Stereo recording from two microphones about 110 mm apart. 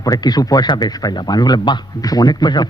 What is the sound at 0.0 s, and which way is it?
Speech, 35° left (ahead or behind).